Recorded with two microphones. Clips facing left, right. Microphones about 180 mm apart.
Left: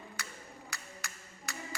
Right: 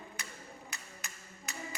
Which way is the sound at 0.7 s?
20° right (ahead or behind).